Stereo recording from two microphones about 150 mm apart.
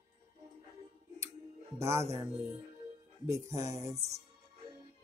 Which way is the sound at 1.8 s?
20° right (ahead or behind).